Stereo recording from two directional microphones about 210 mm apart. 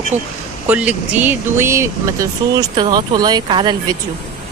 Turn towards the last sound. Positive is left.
turn(degrees=-20)  # may be behind; listen again after turning